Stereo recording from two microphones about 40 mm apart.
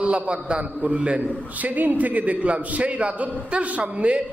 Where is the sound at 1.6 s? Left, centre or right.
Right.